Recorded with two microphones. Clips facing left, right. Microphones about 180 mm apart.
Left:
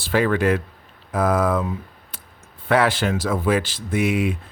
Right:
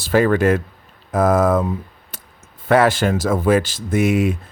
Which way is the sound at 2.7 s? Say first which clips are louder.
Right 4 dB; 45° right (ahead or behind).